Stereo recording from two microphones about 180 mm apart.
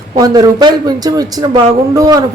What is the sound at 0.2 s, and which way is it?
A woman's voice, 20° right (ahead or behind).